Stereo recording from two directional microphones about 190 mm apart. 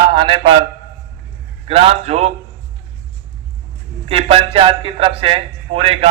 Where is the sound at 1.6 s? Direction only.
30° right (ahead or behind).